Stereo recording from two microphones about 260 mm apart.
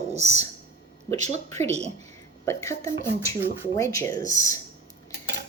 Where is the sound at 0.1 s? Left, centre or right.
Right.